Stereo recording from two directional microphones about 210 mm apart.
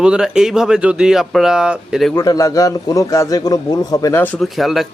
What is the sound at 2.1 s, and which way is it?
A man's voice, 15° left (ahead or behind).